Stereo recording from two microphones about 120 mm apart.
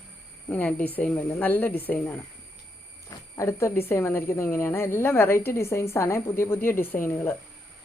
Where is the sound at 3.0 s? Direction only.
30° left (ahead or behind).